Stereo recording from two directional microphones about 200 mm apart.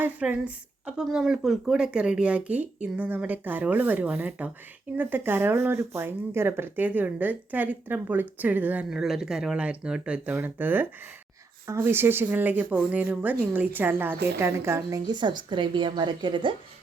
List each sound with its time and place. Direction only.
0.0 s speech: 5° right (ahead or behind)
11.9 s a woman's voice: 10° right (ahead or behind)